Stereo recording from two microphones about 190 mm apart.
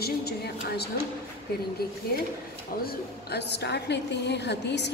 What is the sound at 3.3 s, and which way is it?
A woman's voice, 60° left (ahead or behind).